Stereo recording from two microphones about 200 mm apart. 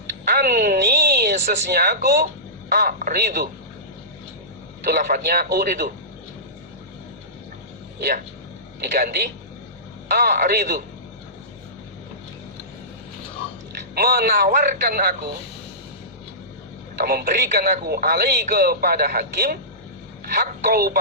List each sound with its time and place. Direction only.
0.3 s a woman's voice: 50° right (ahead or behind)
4.9 s speech: 45° right (ahead or behind)
8.8 s speech: 50° right (ahead or behind)
13.9 s speech: 50° right (ahead or behind)
17.0 s speech: 50° right (ahead or behind)